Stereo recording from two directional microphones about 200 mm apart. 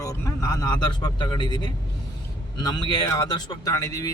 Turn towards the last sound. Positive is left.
turn(degrees=20)  # may be behind; listen again after turning